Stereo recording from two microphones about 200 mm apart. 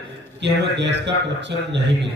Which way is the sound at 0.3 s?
60° right (ahead or behind).